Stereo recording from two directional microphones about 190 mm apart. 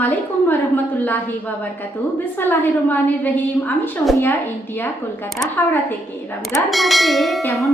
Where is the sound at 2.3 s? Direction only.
10° left (ahead or behind).